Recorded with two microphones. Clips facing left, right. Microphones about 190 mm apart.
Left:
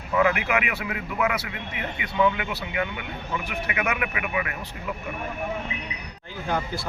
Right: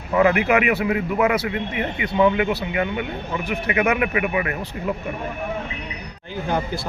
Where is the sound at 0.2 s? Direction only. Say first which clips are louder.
Right 6 dB; 35° right (ahead or behind).